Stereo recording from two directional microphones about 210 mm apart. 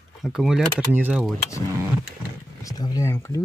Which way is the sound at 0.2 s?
Centre (ahead or behind).